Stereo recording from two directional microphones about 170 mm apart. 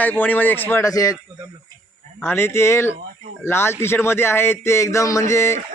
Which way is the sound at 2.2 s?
15° left (ahead or behind).